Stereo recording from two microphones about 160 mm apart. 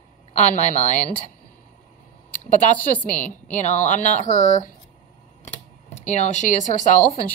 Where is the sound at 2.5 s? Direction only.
55° left (ahead or behind).